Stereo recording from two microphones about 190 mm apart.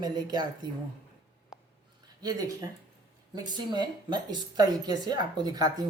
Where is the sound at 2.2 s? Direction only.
20° right (ahead or behind).